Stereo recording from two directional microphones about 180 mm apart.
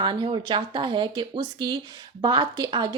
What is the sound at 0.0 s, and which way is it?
Speech, 25° right (ahead or behind).